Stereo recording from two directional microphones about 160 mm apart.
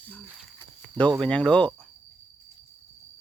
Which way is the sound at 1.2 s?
5° left (ahead or behind).